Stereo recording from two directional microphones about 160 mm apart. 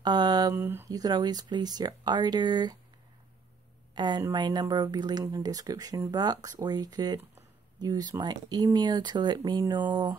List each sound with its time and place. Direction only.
0.0 s speech: 25° right (ahead or behind)
3.9 s speech: 25° right (ahead or behind)